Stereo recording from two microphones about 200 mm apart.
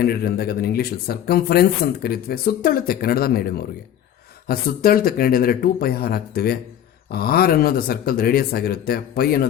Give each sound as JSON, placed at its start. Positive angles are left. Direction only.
{"t": 0.0, "sound": "speech", "side_deg": 50}